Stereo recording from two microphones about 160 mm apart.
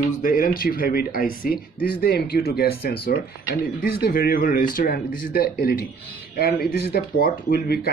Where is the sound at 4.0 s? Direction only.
65° left (ahead or behind).